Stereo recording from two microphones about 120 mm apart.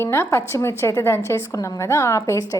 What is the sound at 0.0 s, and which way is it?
A woman's voice, 20° left (ahead or behind).